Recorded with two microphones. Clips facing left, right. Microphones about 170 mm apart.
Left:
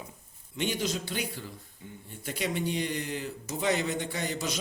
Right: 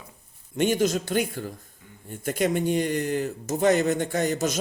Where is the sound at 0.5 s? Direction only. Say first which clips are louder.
Right 9 dB; 50° right (ahead or behind).